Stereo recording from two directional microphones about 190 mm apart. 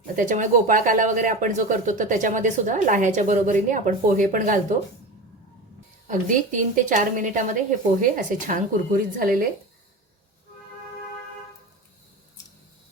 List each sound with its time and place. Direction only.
0.2 s speech: 45° right (ahead or behind)
6.1 s speech: 45° right (ahead or behind)